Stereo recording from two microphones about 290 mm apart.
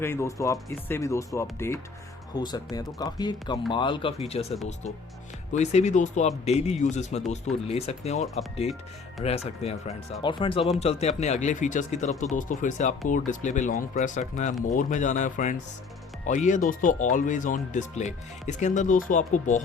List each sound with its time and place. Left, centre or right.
0.0 s speech: centre
5.5 s speech: left